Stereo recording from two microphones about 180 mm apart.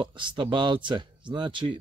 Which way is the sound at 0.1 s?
25° right (ahead or behind).